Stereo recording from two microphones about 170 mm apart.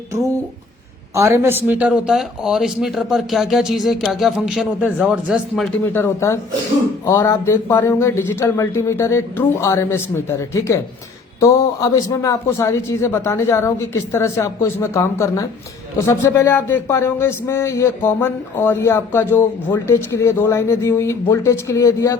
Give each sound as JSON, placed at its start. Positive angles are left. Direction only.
{"t": 1.1, "sound": "speech", "side_deg": -15}
{"t": 5.8, "sound": "a man's voice", "side_deg": 15}